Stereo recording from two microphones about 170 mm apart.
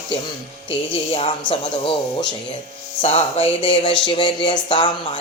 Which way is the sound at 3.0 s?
35° left (ahead or behind).